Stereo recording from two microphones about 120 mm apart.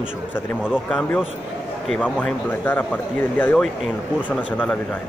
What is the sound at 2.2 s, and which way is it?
Speech, 15° left (ahead or behind).